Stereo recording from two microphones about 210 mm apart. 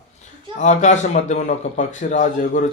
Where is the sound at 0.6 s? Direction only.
35° left (ahead or behind).